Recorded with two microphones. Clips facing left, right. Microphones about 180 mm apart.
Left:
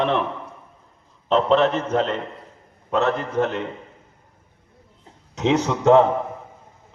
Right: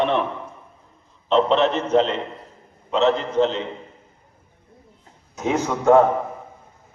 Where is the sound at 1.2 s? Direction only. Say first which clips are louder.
Even; 45° left (ahead or behind).